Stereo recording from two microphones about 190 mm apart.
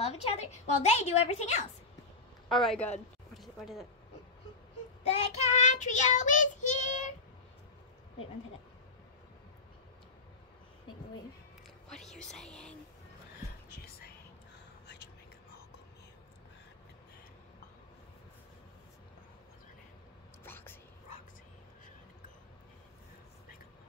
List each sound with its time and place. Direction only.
0.0 s child singing: 35° left (ahead or behind)
2.5 s speech: centre (ahead or behind)
3.3 s a sound: centre (ahead or behind)
5.1 s child singing: 35° left (ahead or behind)
11.9 s whispering: centre (ahead or behind)
13.7 s whispering: 55° left (ahead or behind)
20.4 s whispering: 10° left (ahead or behind)